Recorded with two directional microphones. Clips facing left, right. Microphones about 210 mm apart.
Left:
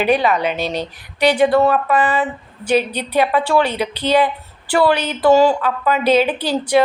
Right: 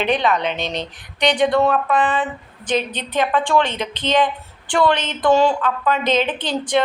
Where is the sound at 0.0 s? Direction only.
10° left (ahead or behind).